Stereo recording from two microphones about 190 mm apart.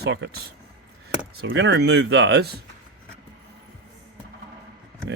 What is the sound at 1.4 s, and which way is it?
Speech, 70° right (ahead or behind).